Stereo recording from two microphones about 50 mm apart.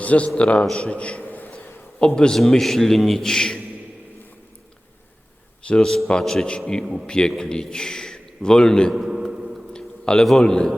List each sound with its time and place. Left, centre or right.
0.0 s a man's voice: left
1.2 s a sound: left
2.0 s a man's voice: centre
5.6 s a man's voice: centre
6.8 s speech: centre
7.1 s a man's voice: centre
9.0 s speech: centre
9.3 s a sound: centre
9.7 s a sound: centre
10.4 s a man's voice: centre